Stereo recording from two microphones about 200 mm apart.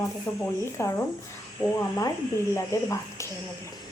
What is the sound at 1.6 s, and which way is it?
Speech, 25° left (ahead or behind).